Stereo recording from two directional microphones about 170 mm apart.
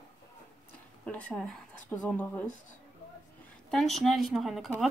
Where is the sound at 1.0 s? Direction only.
10° left (ahead or behind).